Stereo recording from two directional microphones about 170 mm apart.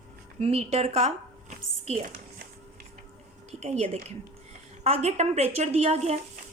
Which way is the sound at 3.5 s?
40° right (ahead or behind).